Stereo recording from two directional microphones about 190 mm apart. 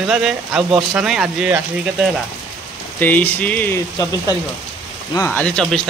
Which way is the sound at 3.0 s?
10° left (ahead or behind).